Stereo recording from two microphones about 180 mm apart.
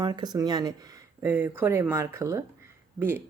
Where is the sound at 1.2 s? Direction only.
10° right (ahead or behind).